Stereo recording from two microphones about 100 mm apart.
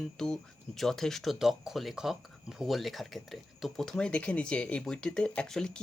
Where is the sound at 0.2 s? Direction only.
5° left (ahead or behind).